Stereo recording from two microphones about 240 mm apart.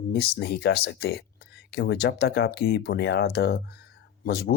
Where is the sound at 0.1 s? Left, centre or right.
Left.